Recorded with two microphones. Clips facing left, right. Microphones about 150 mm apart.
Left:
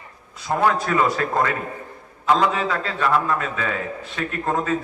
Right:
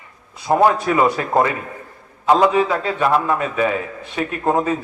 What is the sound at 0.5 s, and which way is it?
A man's voice, 20° right (ahead or behind).